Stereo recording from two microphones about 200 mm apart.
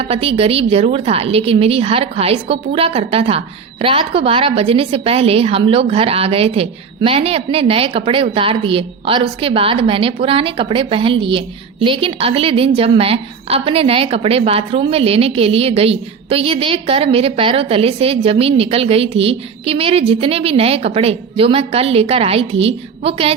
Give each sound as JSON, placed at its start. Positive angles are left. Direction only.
{"t": 0.0, "sound": "a woman's voice", "side_deg": -30}